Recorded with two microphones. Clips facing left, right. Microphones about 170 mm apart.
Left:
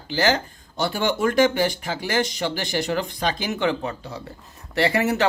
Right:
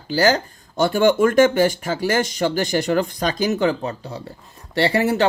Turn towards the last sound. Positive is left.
turn(degrees=-30)  # may be behind; listen again after turning